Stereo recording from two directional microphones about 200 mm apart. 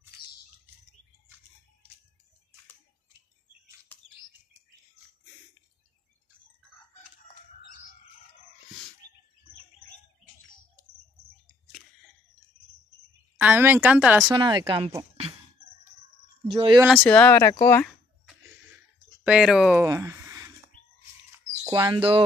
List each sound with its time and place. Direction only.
3.9 s bird: 10° left (ahead or behind)
13.4 s speech: 10° right (ahead or behind)
14.3 s speech: 20° right (ahead or behind)
16.5 s speech: 25° right (ahead or behind)
16.8 s speech: 5° left (ahead or behind)
19.2 s speech: 5° right (ahead or behind)
19.9 s a sound: 15° right (ahead or behind)
21.6 s speech: 20° right (ahead or behind)